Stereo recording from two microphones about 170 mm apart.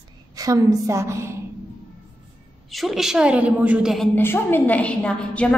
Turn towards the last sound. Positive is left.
turn(degrees=5)  # may be behind; listen again after turning